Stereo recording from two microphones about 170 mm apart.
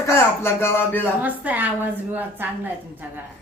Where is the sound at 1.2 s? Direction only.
10° right (ahead or behind).